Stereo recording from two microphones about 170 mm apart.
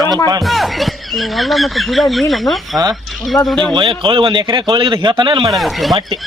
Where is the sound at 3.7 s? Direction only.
30° right (ahead or behind).